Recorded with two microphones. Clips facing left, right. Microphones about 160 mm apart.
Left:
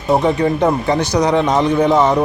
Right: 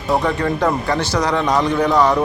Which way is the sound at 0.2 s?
20° left (ahead or behind).